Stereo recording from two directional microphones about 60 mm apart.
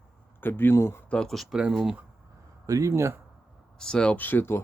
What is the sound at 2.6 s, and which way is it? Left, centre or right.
Speech, right.